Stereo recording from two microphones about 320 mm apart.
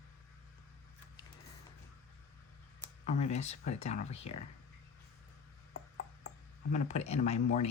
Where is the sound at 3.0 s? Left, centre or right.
Left.